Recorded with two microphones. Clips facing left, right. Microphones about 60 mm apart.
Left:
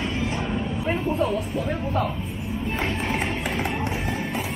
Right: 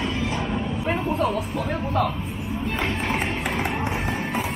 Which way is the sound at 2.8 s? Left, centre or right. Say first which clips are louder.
Right 1 dB; right.